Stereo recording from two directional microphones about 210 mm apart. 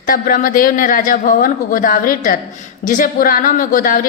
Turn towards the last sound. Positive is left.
turn(degrees=40)  # may be behind; listen again after turning